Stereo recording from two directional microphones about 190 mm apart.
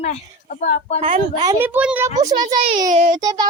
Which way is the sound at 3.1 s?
20° right (ahead or behind).